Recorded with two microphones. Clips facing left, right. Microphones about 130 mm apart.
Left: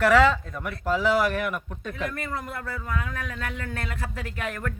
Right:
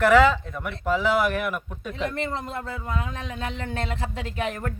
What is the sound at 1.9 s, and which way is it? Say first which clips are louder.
Speech: right 4 dB; 25° right (ahead or behind).